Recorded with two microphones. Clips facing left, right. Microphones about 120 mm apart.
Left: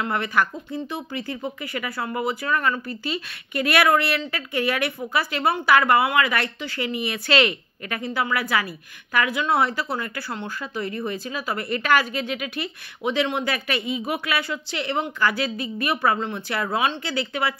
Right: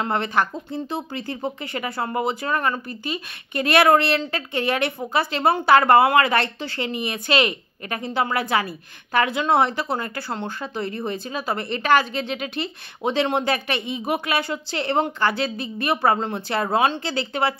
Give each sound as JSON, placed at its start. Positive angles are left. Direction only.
{"t": 0.0, "sound": "speech", "side_deg": -30}
{"t": 2.9, "sound": "a woman's voice", "side_deg": -25}